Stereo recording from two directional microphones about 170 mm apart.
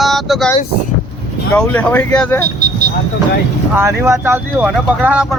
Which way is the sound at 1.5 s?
10° left (ahead or behind).